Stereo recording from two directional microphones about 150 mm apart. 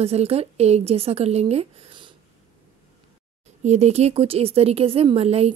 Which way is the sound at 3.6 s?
45° right (ahead or behind).